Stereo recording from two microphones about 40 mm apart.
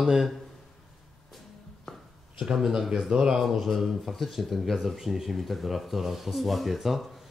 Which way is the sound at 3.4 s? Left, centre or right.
Centre.